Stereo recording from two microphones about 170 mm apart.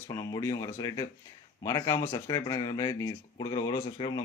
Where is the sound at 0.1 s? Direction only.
20° left (ahead or behind).